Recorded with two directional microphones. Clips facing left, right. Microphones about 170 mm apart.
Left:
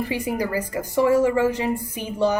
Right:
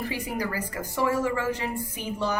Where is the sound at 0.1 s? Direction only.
20° left (ahead or behind).